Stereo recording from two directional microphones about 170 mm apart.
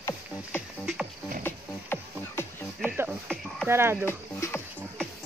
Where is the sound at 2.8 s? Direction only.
10° right (ahead or behind).